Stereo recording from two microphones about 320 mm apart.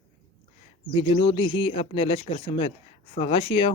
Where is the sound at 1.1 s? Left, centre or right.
Centre.